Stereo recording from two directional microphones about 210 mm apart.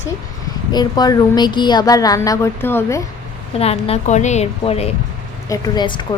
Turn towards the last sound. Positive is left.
turn(degrees=20)  # may be behind; listen again after turning